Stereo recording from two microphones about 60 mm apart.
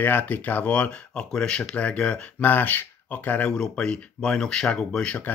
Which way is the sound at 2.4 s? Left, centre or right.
Left.